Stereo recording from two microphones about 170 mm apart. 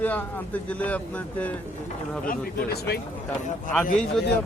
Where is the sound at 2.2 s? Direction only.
70° left (ahead or behind).